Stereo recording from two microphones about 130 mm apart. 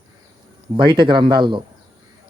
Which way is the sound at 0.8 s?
35° right (ahead or behind).